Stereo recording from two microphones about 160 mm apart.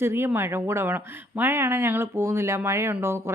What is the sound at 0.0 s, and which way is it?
Speech, 15° right (ahead or behind).